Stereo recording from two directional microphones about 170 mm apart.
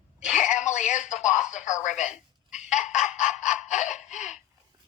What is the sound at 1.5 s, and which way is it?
Radio, 45° left (ahead or behind).